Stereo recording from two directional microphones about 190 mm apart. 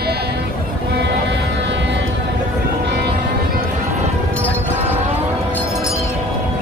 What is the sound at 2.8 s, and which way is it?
Vehicle, 60° right (ahead or behind).